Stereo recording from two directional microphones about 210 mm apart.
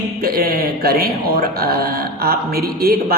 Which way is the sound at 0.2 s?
45° right (ahead or behind).